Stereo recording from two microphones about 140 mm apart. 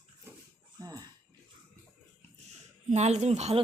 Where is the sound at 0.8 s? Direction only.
25° right (ahead or behind).